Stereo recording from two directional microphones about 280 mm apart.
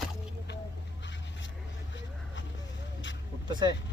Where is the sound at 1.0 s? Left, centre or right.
Left.